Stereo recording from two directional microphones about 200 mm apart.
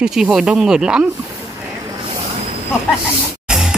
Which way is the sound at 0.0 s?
5° right (ahead or behind).